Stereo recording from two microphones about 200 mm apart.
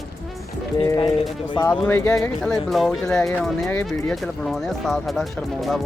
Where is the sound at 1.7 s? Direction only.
10° left (ahead or behind).